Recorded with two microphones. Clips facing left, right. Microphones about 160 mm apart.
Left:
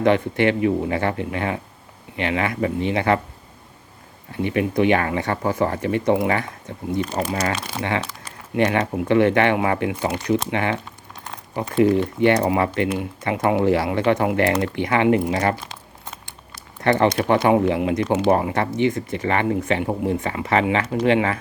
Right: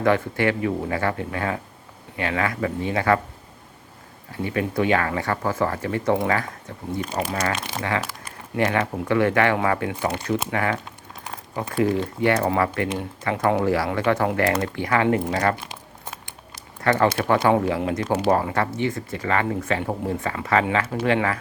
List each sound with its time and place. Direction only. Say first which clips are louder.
0.0 s speech: left 3 dB; 20° left (ahead or behind)
4.4 s speech: left 4 dB; 20° left (ahead or behind)
11.8 s speech: left 5 dB; 20° left (ahead or behind)
16.8 s speech: left 2 dB; 25° left (ahead or behind)